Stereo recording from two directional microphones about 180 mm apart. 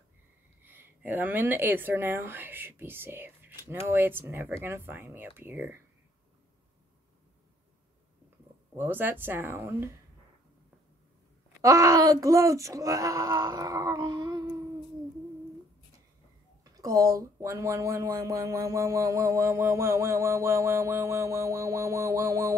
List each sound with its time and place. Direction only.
0.6 s speech: 10° right (ahead or behind)
8.7 s speech: 10° right (ahead or behind)
11.6 s speech: 20° right (ahead or behind)
16.7 s speech: 20° right (ahead or behind)